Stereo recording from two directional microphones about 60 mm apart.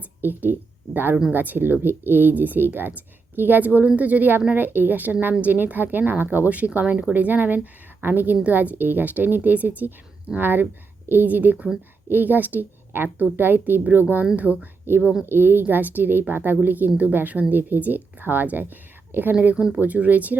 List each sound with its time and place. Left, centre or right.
0.2 s a woman's voice: right
19.5 s speech: centre
19.8 s a woman's voice: right